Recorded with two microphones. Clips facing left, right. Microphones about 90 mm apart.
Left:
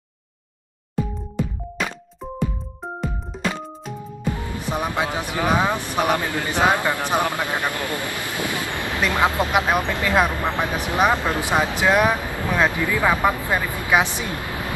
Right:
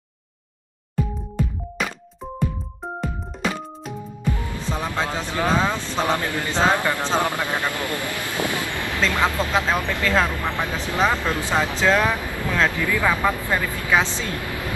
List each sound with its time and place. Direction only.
4.2 s speech: 20° left (ahead or behind)